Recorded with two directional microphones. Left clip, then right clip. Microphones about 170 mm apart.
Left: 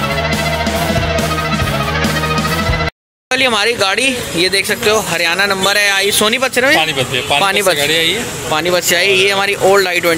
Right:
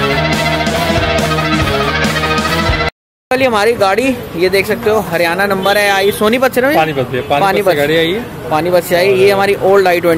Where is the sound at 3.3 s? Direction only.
5° right (ahead or behind).